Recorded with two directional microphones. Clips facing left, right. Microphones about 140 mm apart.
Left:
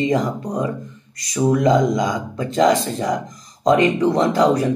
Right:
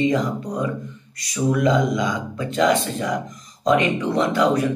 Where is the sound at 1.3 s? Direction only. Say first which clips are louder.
Left 3 dB; 40° left (ahead or behind).